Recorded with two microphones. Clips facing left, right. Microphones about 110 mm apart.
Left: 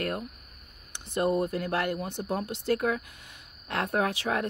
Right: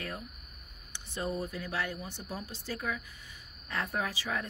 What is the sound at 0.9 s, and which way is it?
A woman's voice, 60° left (ahead or behind).